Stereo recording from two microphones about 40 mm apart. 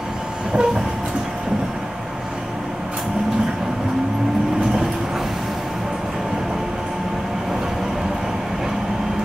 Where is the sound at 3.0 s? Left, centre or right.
Centre.